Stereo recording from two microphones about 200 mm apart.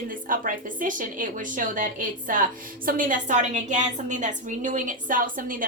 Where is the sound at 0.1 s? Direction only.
40° right (ahead or behind).